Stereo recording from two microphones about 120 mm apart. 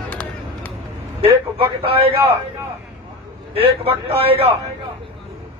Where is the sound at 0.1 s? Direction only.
15° left (ahead or behind).